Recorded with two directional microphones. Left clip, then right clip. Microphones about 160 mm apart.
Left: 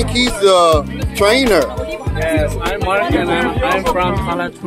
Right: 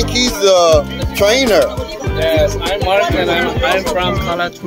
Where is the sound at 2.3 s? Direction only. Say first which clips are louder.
Right 3 dB; 15° left (ahead or behind).